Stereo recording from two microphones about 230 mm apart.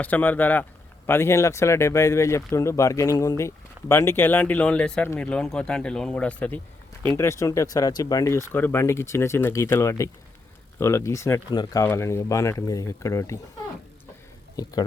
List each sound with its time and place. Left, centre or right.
0.0 s speech: centre
14.5 s speech: centre